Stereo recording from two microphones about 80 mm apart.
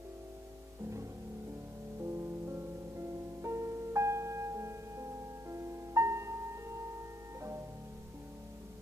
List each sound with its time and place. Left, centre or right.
2.0 s music: right